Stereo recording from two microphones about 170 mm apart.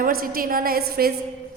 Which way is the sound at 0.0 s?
60° right (ahead or behind).